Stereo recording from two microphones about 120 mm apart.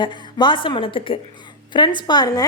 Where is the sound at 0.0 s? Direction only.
40° left (ahead or behind).